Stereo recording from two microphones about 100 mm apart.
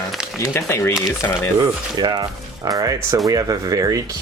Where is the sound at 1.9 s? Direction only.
45° right (ahead or behind).